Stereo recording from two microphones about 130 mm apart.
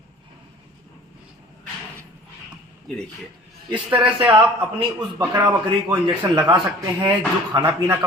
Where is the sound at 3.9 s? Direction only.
40° right (ahead or behind).